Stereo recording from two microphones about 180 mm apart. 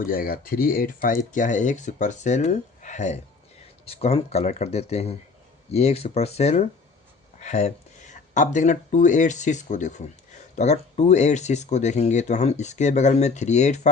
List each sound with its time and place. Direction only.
0.0 s speech: 50° left (ahead or behind)